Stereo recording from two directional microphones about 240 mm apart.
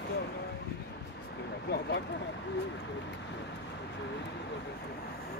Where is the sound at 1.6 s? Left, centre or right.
Left.